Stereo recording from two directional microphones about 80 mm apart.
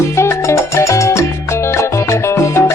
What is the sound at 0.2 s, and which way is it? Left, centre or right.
Salsa music, left.